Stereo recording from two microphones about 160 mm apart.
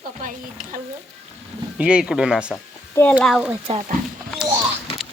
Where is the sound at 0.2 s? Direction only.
55° right (ahead or behind).